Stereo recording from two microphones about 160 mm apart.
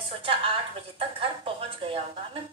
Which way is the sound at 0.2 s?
35° right (ahead or behind).